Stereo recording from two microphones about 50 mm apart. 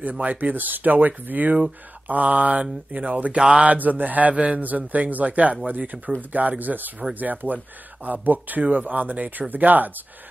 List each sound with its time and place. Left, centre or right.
0.0 s speech: right
3.3 s speech: centre
3.6 s speech: right